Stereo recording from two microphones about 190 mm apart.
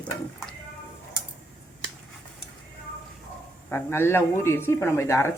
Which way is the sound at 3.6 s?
10° left (ahead or behind).